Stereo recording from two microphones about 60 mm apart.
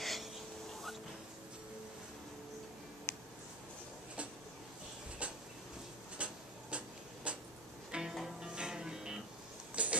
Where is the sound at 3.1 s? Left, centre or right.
Left.